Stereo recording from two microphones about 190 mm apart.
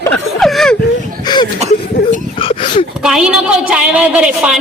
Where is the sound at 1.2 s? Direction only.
20° left (ahead or behind).